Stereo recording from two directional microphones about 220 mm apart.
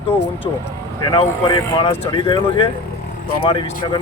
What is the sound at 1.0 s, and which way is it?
Speech, 20° left (ahead or behind).